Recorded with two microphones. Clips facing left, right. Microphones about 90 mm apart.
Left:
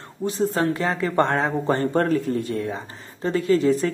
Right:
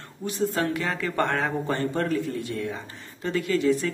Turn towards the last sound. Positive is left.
turn(degrees=35)  # may be behind; listen again after turning